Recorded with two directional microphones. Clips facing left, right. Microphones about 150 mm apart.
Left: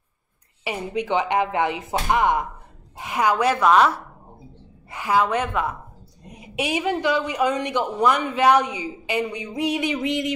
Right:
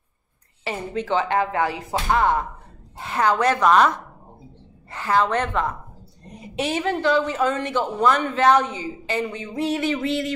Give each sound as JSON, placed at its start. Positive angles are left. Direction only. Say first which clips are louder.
{"t": 0.7, "sound": "a woman's voice", "louder": "even", "side_deg": 15}